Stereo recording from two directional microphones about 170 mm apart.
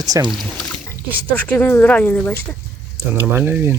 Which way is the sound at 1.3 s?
10° left (ahead or behind).